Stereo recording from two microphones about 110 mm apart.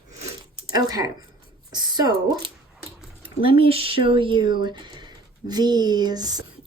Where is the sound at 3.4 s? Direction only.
55° right (ahead or behind); by 6.4 s 35° right (ahead or behind).